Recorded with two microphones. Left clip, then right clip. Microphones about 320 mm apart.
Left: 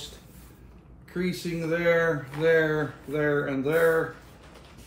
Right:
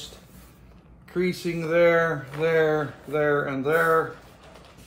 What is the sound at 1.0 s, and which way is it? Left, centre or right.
Speech, centre.